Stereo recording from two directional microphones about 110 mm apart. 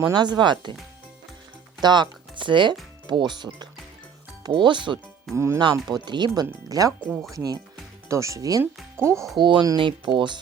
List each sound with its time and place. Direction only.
0.1 s speech: 45° right (ahead or behind)
1.8 s speech: 45° right (ahead or behind)
5.3 s speech: 25° right (ahead or behind)
5.7 s speech: 40° right (ahead or behind)
8.0 s speech: 30° right (ahead or behind)
9.4 s speech: 45° right (ahead or behind)